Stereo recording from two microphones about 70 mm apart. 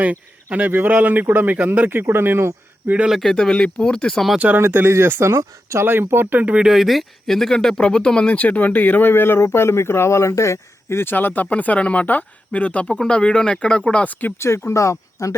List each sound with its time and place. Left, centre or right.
0.7 s speech: right
3.1 s speech: centre
4.4 s speech: right
4.6 s speech: right
5.3 s speech: right
5.8 s speech: right
6.7 s speech: centre; by 14.3 s left
14.3 s speech: left